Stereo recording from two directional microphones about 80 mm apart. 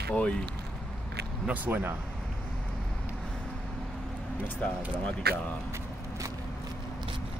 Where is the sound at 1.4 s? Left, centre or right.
Centre.